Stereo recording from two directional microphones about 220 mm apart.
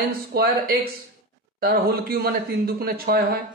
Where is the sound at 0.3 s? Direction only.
45° right (ahead or behind).